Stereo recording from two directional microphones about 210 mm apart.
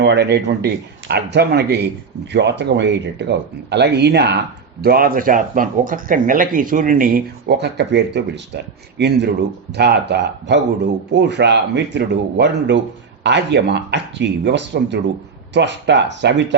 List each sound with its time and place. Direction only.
0.0 s speech: 55° right (ahead or behind)